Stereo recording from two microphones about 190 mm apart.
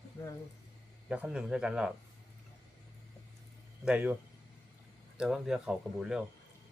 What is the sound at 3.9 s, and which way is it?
Speech, 5° right (ahead or behind).